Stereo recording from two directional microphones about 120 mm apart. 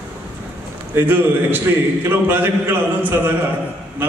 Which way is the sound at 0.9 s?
15° right (ahead or behind).